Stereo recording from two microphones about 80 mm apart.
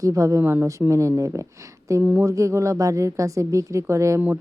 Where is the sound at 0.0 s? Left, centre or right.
Right.